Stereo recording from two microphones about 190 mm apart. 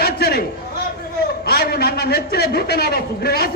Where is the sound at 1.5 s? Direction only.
55° left (ahead or behind).